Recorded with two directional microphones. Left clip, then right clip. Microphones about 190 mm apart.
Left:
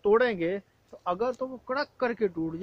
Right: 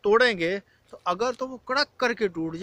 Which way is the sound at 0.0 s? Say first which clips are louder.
Right 3 dB; 10° right (ahead or behind).